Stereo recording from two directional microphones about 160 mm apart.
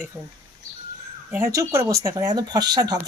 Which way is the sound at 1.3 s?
20° right (ahead or behind).